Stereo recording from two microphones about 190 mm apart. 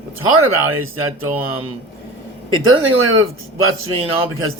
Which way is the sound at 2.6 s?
90° right.